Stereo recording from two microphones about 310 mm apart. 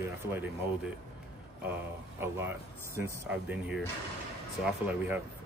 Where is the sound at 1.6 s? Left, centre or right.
Centre.